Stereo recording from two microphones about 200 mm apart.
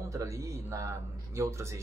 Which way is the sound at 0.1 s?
15° right (ahead or behind).